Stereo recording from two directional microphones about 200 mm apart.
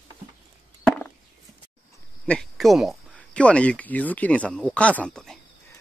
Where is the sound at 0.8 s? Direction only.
5° left (ahead or behind).